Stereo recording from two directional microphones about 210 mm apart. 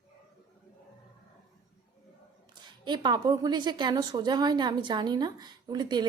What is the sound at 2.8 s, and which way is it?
A woman's voice, 20° right (ahead or behind).